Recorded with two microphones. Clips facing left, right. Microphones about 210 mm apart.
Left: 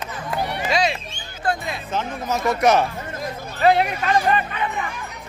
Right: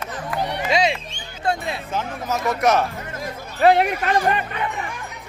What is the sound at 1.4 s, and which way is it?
Music, 25° right (ahead or behind).